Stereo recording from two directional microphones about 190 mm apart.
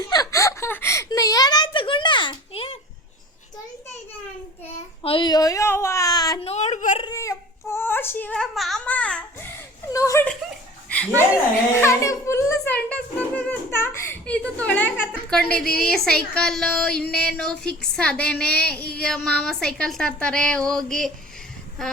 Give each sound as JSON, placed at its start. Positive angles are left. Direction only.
{"t": 0.1, "sound": "a sound", "side_deg": 20}
{"t": 5.0, "sound": "a child's voice", "side_deg": 25}
{"t": 6.4, "sound": "a sound", "side_deg": 35}
{"t": 7.0, "sound": "baby cry", "side_deg": 15}
{"t": 7.7, "sound": "a child's voice", "side_deg": 10}
{"t": 10.8, "sound": "chuckle", "side_deg": 5}
{"t": 11.7, "sound": "a child's voice", "side_deg": 15}